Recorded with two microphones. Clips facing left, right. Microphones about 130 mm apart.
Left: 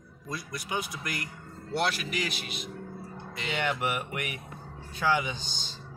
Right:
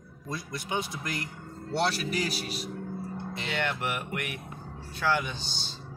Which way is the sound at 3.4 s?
5° left (ahead or behind).